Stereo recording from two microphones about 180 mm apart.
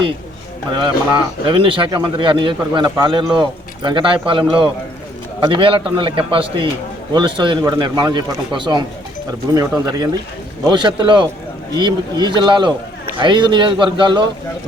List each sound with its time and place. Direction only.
0.8 s a man's voice: 25° right (ahead or behind)